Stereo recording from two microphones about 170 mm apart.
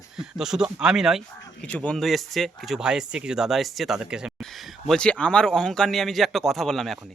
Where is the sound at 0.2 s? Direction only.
5° right (ahead or behind).